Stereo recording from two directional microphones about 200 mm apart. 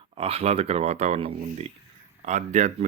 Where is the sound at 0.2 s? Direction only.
30° right (ahead or behind).